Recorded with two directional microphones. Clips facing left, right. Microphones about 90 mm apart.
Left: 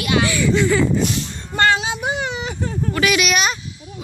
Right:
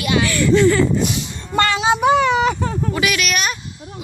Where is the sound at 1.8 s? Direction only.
80° right.